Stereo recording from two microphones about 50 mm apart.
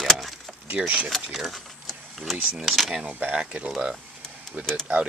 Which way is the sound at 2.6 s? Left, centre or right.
Centre.